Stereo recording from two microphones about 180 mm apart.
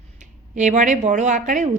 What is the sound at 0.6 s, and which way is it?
Speech, 45° right (ahead or behind).